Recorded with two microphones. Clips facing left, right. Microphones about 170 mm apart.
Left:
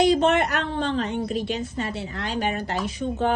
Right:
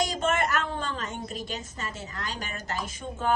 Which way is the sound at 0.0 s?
45° right (ahead or behind).